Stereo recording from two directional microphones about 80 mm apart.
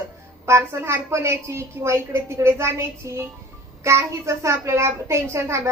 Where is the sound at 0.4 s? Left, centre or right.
Right.